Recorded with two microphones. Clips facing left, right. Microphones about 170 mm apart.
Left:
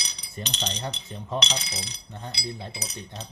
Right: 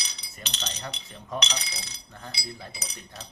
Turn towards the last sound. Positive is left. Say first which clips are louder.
# left 5 dB
turn(degrees=25)  # may be behind; listen again after turning